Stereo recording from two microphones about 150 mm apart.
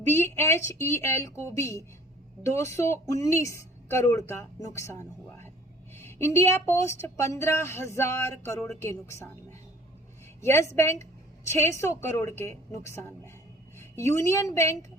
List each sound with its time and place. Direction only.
0.1 s a woman's voice: 15° left (ahead or behind)